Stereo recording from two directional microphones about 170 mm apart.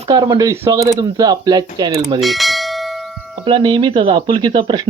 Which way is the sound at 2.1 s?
Centre (ahead or behind).